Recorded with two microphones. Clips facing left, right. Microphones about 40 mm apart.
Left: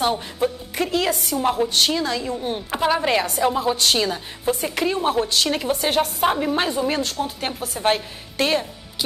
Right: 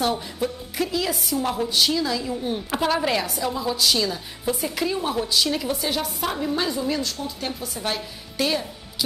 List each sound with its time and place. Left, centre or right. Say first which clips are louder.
0.0 s a woman's voice: left 3 dB; left
0.9 s a woman's voice: left 5 dB; left
1.4 s a woman's voice: left 3 dB; left
2.7 s speech: left 3 dB; centre
3.4 s a woman's voice: left 3 dB; left